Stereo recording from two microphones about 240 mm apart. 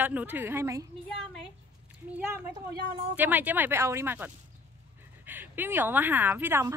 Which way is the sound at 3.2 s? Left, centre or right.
Centre.